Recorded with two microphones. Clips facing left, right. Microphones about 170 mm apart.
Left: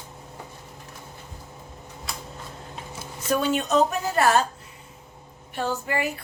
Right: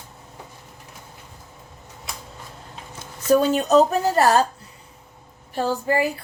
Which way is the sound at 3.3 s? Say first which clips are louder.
Right 6 dB; 40° right (ahead or behind).